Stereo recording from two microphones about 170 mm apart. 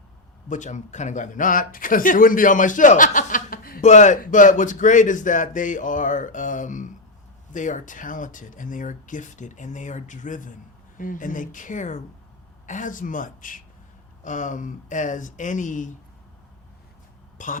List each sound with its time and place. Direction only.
0.4 s speech: 45° left (ahead or behind)
3.8 s speech: 45° left (ahead or behind)
17.3 s speech: 50° left (ahead or behind)